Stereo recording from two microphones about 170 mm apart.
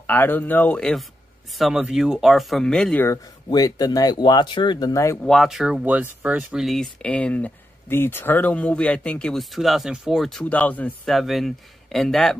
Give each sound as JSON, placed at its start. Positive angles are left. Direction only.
{"t": 0.0, "sound": "speech", "side_deg": 10}
{"t": 3.4, "sound": "speech", "side_deg": 20}
{"t": 5.2, "sound": "speech", "side_deg": 0}